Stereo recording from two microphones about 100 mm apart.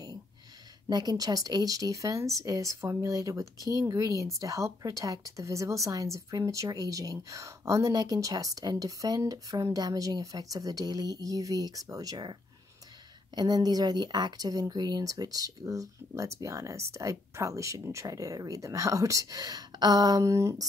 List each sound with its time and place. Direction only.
0.8 s a woman's voice: 40° right (ahead or behind)